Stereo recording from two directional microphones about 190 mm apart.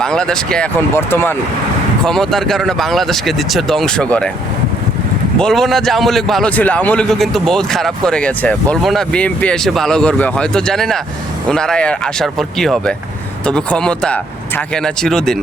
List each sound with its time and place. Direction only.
0.0 s a man's voice: 5° left (ahead or behind)
5.4 s a man's voice: centre (ahead or behind)